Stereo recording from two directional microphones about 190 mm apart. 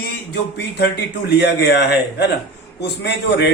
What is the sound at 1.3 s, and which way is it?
A man's voice, 60° left (ahead or behind).